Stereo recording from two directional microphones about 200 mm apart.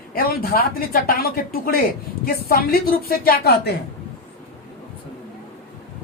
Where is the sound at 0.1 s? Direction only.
45° left (ahead or behind).